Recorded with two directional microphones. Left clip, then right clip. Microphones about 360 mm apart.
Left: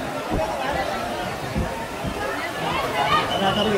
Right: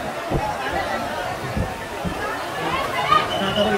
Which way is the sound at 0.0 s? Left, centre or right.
Centre.